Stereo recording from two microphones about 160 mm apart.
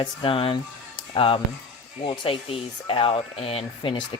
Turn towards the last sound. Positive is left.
turn(degrees=30)  # may be behind; listen again after turning